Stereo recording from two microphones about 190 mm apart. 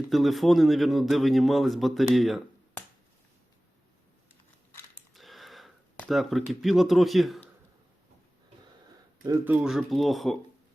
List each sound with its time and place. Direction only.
0.1 s speech: centre (ahead or behind)
5.1 s a sound: centre (ahead or behind)
9.2 s speech: 10° right (ahead or behind)